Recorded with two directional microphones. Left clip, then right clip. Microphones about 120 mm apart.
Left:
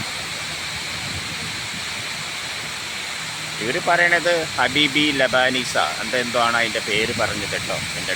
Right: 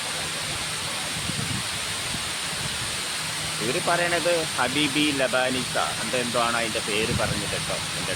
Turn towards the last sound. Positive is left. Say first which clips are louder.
# left 5 dB
turn(degrees=25)  # may be behind; listen again after turning